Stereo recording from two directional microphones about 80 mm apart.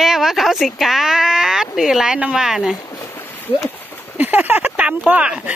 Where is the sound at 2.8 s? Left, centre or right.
Left.